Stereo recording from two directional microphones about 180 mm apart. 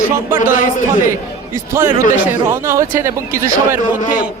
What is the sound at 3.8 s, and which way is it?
Speech, 45° left (ahead or behind).